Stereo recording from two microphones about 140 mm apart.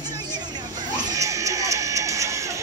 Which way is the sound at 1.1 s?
20° right (ahead or behind).